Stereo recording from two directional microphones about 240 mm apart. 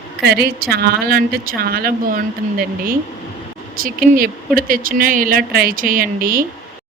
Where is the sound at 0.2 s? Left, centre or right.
Right.